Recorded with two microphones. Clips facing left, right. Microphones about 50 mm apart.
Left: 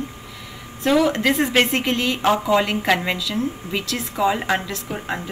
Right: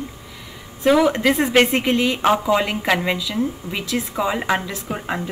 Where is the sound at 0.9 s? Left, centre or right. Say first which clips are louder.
Right 2 dB; centre.